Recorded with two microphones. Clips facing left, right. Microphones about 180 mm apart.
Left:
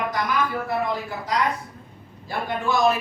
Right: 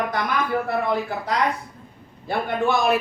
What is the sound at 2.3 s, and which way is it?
Speech, 60° right (ahead or behind).